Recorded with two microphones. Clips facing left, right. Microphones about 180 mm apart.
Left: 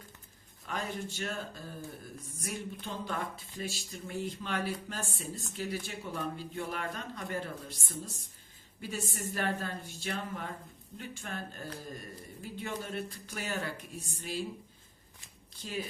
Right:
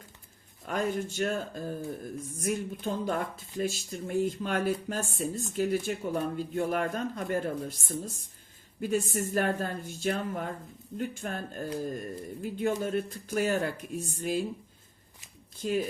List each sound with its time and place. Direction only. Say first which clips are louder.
0.7 s speech: right 7 dB; 50° right (ahead or behind)
15.5 s speech: right 10 dB; 50° right (ahead or behind)